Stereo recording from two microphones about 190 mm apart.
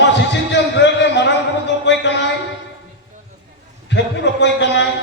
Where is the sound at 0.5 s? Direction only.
65° left (ahead or behind).